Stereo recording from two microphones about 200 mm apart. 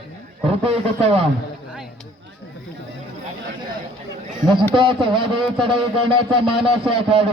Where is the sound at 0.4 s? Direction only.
30° right (ahead or behind).